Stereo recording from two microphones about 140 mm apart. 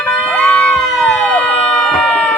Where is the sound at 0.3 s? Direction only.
10° left (ahead or behind).